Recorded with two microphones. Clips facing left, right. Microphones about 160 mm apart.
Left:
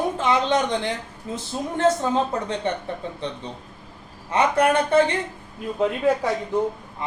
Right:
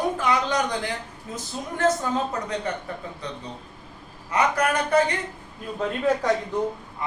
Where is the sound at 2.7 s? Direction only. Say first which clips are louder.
Left 4 dB; 25° left (ahead or behind).